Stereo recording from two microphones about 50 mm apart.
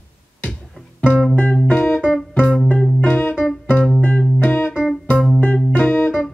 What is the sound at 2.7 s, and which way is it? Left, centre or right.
Music, centre.